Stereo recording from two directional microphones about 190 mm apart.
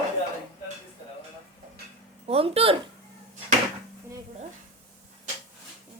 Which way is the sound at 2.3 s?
30° right (ahead or behind).